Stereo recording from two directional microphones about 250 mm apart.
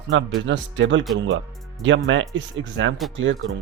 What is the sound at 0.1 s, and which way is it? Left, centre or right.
Speech, right.